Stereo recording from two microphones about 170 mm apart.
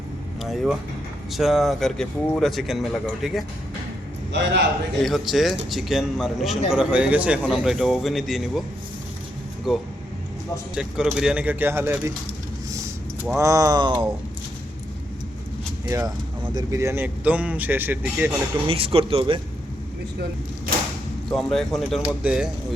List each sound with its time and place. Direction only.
0.4 s a man's voice: centre (ahead or behind)
4.3 s a man's voice: 90° right
5.0 s a man's voice: centre (ahead or behind)
9.7 s a man's voice: centre (ahead or behind)
13.3 s speech: 20° right (ahead or behind)
15.9 s speech: 20° right (ahead or behind)
18.7 s speech: 35° right (ahead or behind)
21.2 s a man's voice: centre (ahead or behind)